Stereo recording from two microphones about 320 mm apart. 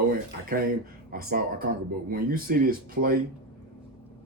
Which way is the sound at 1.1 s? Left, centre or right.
Right.